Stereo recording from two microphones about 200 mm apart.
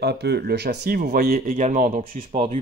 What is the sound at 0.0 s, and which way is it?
Speech, 55° right (ahead or behind).